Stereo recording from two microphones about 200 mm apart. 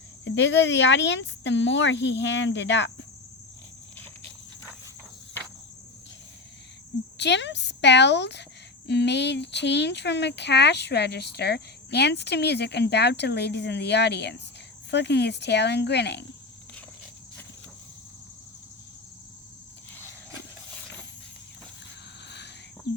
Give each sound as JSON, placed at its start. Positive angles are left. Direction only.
{"t": 0.3, "sound": "speech", "side_deg": 65}
{"t": 7.2, "sound": "speech", "side_deg": 60}